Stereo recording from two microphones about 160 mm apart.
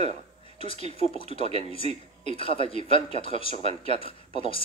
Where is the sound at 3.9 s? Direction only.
35° left (ahead or behind).